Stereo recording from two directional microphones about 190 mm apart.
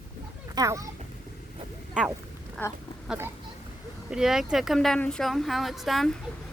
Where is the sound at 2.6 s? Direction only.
10° left (ahead or behind).